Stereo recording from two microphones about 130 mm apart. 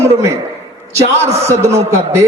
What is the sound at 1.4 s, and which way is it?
Speech, 20° right (ahead or behind).